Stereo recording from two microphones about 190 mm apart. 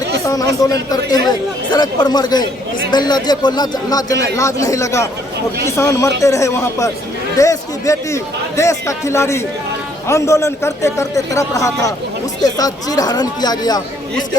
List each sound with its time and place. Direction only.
0.6 s a man's voice: 20° left (ahead or behind)